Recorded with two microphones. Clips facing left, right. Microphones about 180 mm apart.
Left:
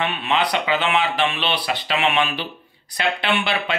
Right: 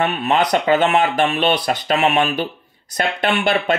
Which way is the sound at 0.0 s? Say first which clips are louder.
Right 4 dB; 40° right (ahead or behind).